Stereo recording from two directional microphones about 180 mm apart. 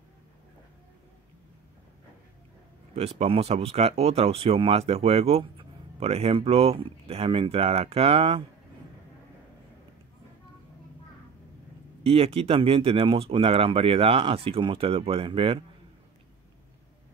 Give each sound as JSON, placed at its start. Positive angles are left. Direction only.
{"t": 3.2, "sound": "speech", "side_deg": -35}
{"t": 12.0, "sound": "speech", "side_deg": -30}